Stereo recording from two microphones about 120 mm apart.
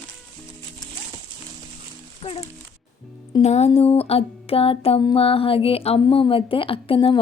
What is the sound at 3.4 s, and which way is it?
A woman's voice, 65° left (ahead or behind).